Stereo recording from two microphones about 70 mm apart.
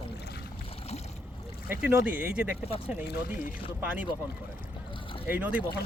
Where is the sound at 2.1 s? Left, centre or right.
Right.